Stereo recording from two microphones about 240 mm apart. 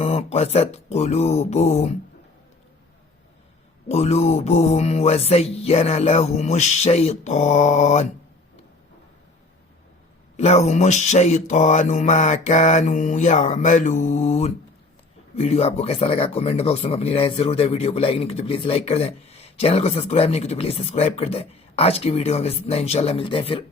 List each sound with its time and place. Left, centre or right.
0.0 s speech: left
3.8 s speech: left
10.3 s speech: left